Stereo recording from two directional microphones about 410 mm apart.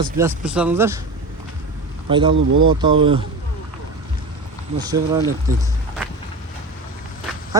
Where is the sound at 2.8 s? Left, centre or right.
Centre.